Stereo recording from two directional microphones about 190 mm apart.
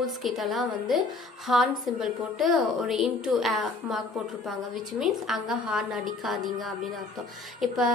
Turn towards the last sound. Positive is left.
turn(degrees=0)  # may be behind; listen again after turning